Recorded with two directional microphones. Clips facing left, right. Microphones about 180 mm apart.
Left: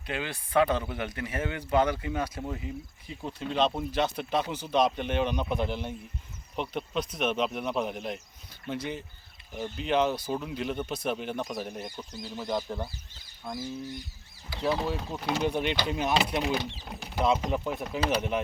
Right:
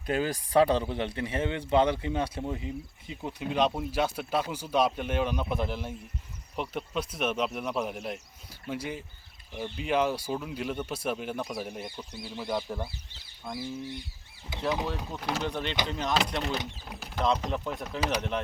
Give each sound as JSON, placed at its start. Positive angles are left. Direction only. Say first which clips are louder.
{"t": 0.0, "sound": "speech", "louder": "right 6 dB", "side_deg": -40}
{"t": 2.5, "sound": "speech", "louder": "right 2 dB", "side_deg": -15}
{"t": 12.1, "sound": "bird", "louder": "left 1 dB", "side_deg": 40}
{"t": 12.4, "sound": "speech", "louder": "even", "side_deg": -5}
{"t": 13.6, "sound": "bird", "louder": "right 1 dB", "side_deg": 45}
{"t": 14.5, "sound": "speech", "louder": "left 2 dB", "side_deg": -20}
{"t": 14.8, "sound": "speech", "louder": "left 2 dB", "side_deg": 5}